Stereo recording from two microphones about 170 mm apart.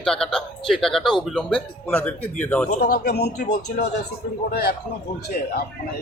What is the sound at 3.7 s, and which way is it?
Speech, 50° left (ahead or behind).